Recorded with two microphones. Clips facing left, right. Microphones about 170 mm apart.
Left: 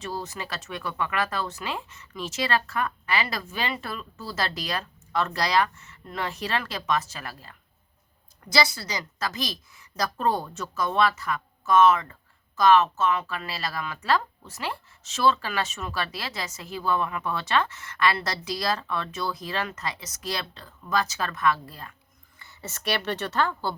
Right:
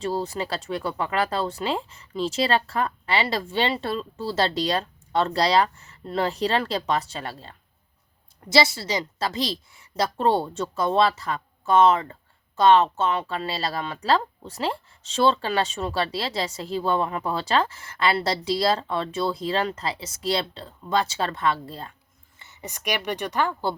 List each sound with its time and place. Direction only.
0.0 s a woman's voice: 30° right (ahead or behind)